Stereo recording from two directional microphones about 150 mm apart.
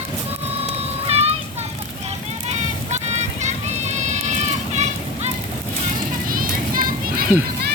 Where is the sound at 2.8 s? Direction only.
50° right (ahead or behind).